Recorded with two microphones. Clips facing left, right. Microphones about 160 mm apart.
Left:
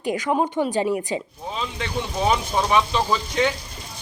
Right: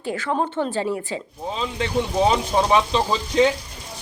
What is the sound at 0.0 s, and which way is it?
Speech, 15° left (ahead or behind).